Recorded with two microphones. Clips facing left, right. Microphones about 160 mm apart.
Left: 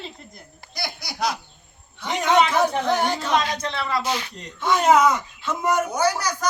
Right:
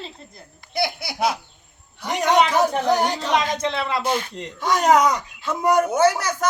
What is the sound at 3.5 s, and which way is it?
Speech, 25° right (ahead or behind).